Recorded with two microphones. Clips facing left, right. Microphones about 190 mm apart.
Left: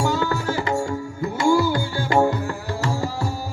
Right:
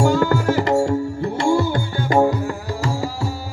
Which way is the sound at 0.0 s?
50° right (ahead or behind).